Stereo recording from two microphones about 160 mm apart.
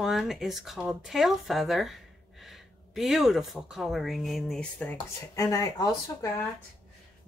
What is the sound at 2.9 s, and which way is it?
Speech, centre (ahead or behind).